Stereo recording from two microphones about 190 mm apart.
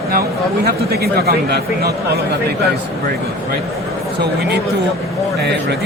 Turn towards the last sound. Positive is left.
turn(degrees=-60)  # may be behind; listen again after turning